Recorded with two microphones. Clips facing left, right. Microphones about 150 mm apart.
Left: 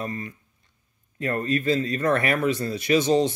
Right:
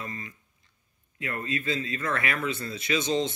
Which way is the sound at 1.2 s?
40° left (ahead or behind).